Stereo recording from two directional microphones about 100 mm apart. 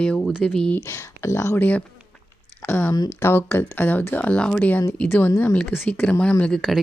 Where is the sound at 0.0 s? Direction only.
10° left (ahead or behind).